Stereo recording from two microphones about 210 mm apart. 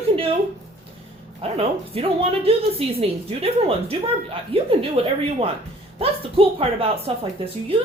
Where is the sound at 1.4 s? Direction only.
30° right (ahead or behind).